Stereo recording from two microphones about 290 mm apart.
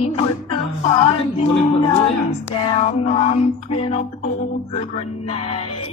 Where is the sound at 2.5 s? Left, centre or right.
Centre.